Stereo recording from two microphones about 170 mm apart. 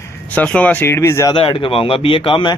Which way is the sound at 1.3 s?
30° left (ahead or behind).